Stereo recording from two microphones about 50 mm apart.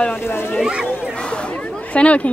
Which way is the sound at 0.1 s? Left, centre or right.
Left.